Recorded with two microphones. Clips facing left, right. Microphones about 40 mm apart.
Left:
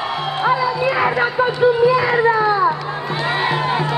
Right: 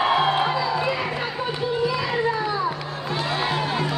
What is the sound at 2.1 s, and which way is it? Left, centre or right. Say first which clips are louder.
Children playing: left 8 dB; left.